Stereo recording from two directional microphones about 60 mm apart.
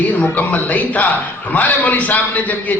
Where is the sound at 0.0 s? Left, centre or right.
Left.